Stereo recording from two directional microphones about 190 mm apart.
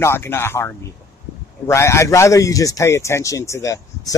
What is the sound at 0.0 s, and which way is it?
Speech, 15° left (ahead or behind).